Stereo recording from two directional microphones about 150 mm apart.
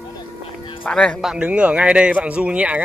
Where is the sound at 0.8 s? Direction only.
5° left (ahead or behind).